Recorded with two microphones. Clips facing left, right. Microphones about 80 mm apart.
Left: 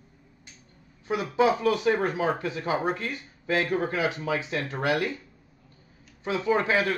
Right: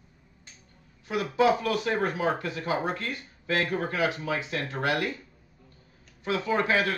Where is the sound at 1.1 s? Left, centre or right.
Left.